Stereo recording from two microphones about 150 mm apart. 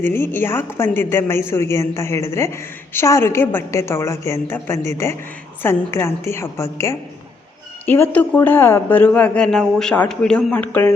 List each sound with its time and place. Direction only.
0.0 s a woman's voice: 15° left (ahead or behind)